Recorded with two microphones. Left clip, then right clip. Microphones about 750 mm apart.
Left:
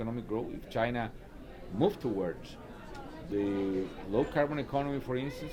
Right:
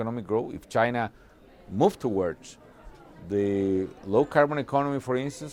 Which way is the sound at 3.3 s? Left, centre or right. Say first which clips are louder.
Right 7 dB; right.